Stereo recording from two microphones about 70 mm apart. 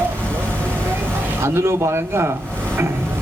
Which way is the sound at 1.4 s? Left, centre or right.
Right.